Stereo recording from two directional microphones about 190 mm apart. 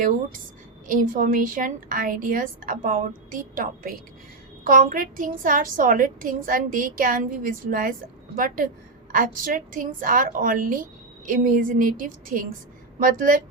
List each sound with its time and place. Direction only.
0.0 s a woman's voice: 45° right (ahead or behind)